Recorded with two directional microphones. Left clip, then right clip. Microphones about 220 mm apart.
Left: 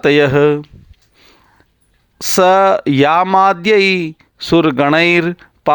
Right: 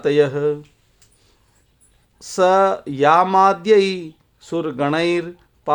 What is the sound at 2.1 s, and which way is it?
Speech, 35° left (ahead or behind).